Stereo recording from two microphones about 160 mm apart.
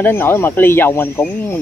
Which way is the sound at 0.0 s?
15° left (ahead or behind).